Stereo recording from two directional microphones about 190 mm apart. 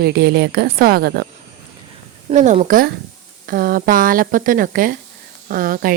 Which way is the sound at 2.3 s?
40° right (ahead or behind).